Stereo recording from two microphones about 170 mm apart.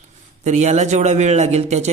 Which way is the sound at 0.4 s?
45° right (ahead or behind).